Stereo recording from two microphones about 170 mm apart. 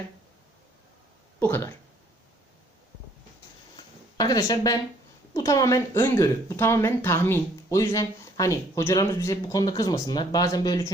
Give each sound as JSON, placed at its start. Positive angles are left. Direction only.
{"t": 1.4, "sound": "speech", "side_deg": 15}
{"t": 4.2, "sound": "speech", "side_deg": 20}